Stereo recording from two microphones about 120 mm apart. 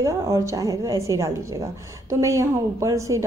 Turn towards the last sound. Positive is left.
turn(degrees=-25)  # may be behind; listen again after turning